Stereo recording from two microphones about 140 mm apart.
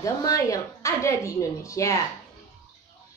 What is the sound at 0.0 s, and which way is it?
A woman's voice, 25° left (ahead or behind).